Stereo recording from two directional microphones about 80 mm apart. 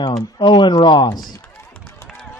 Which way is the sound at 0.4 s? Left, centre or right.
Left.